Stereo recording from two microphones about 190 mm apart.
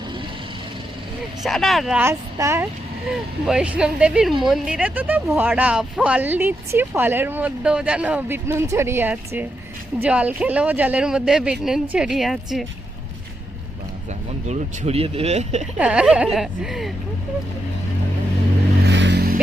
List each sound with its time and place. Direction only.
1.5 s speech: centre (ahead or behind)
14.4 s speech: 35° right (ahead or behind)
15.8 s speech: 5° right (ahead or behind)
18.9 s vehicle: 65° right (ahead or behind)